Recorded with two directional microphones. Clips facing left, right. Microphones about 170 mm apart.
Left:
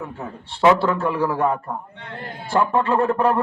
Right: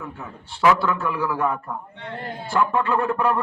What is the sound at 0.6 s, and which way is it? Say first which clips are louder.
A man's voice: left 3 dB; 30° left (ahead or behind).